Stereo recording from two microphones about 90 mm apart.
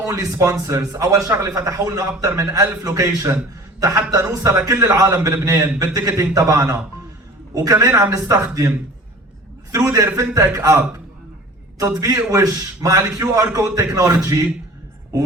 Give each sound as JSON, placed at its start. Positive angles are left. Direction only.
{"t": 0.1, "sound": "a man's voice", "side_deg": -35}
{"t": 9.7, "sound": "a man's voice", "side_deg": -40}
{"t": 11.9, "sound": "a man's voice", "side_deg": -40}